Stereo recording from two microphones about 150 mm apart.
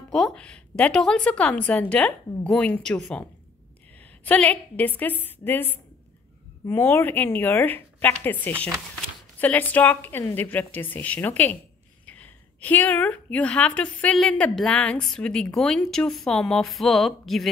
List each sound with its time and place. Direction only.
0.1 s a woman's voice: centre (ahead or behind)
4.2 s a woman's voice: 10° left (ahead or behind)